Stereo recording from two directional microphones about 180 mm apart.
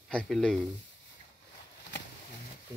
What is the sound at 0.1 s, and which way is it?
Speech, 5° left (ahead or behind).